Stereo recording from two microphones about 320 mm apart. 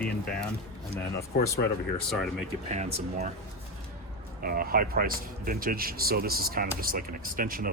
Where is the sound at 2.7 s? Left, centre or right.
Right.